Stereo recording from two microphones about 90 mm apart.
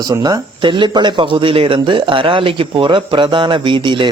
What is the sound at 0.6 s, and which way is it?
A man's voice, 65° right (ahead or behind).